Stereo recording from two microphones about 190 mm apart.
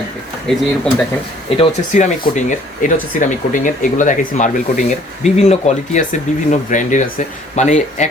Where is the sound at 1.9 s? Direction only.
40° left (ahead or behind).